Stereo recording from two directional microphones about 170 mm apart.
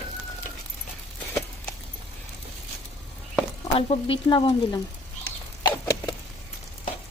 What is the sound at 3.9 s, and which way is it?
Speech, 30° left (ahead or behind).